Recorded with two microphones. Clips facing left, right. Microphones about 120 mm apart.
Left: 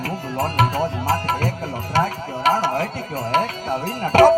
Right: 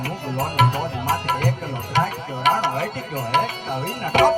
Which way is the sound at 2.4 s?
35° left (ahead or behind).